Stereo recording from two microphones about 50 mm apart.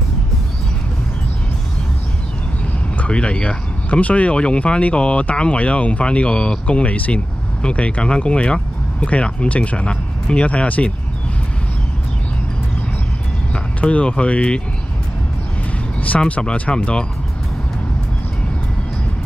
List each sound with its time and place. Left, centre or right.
3.1 s speech: left
13.5 s speech: left
16.3 s speech: left